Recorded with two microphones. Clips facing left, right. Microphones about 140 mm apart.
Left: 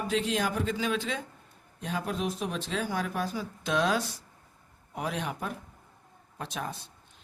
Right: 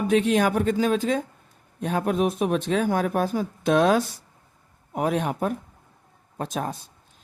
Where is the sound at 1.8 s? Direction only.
55° right (ahead or behind).